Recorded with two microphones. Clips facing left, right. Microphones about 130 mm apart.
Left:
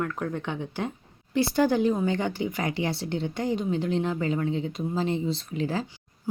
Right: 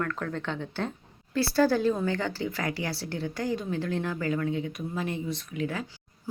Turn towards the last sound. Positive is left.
turn(degrees=30)  # may be behind; listen again after turning